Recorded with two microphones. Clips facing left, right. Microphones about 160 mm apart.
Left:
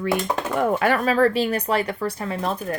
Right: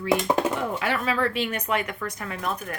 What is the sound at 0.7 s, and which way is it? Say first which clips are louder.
Speech: left 6 dB; 50° left (ahead or behind).